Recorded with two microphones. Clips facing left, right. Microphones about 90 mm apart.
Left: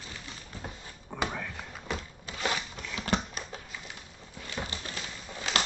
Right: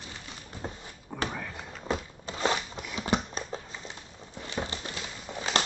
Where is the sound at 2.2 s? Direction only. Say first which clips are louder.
Right 4 dB; 30° right (ahead or behind).